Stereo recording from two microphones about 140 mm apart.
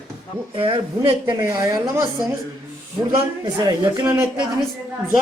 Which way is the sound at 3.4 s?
30° right (ahead or behind).